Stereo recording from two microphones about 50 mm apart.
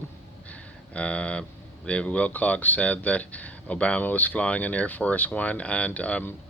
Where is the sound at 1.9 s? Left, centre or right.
Left.